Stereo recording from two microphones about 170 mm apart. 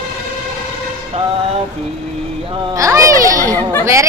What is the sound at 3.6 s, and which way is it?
Speech, 15° left (ahead or behind).